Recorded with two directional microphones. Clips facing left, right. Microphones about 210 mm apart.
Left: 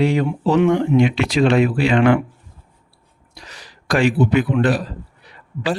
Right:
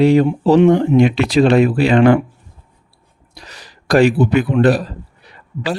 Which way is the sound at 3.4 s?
35° right (ahead or behind).